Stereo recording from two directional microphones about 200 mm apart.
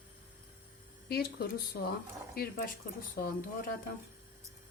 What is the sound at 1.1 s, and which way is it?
Speech, 50° left (ahead or behind).